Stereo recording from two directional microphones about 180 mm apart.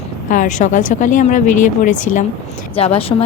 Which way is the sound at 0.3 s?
45° left (ahead or behind).